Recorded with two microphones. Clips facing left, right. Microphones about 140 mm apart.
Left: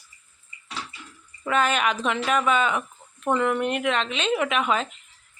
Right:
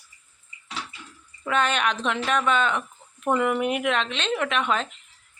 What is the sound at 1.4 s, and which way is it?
Speech, 5° left (ahead or behind).